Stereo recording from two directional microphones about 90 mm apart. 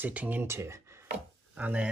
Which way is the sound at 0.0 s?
20° right (ahead or behind).